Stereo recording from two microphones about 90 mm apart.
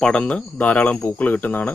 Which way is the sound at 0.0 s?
10° left (ahead or behind).